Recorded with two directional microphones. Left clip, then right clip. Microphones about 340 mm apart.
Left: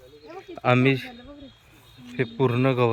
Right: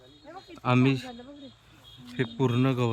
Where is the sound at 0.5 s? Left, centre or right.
Centre.